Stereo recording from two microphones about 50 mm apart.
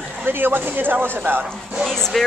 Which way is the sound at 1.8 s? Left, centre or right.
Centre.